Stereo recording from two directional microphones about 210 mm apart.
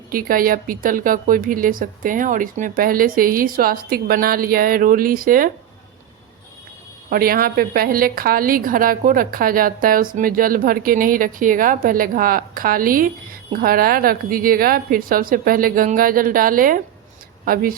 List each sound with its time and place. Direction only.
0.1 s a woman's voice: 40° right (ahead or behind)
7.1 s a woman's voice: 45° right (ahead or behind)